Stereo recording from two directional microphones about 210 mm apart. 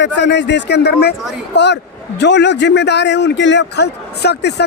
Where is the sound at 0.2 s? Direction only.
55° left (ahead or behind).